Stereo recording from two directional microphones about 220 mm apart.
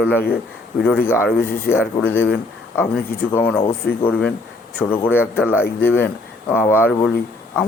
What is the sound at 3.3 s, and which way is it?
Speech, 10° left (ahead or behind).